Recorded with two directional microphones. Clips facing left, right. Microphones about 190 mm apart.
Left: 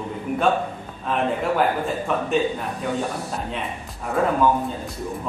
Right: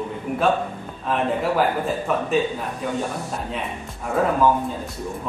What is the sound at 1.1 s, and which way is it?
A man's voice, centre (ahead or behind).